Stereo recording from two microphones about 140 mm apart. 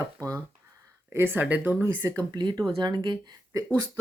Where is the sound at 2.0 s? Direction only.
25° right (ahead or behind).